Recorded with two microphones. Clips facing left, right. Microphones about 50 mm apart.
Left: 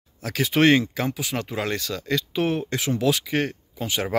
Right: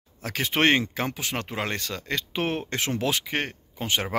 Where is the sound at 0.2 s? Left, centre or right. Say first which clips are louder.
Left 4 dB; right.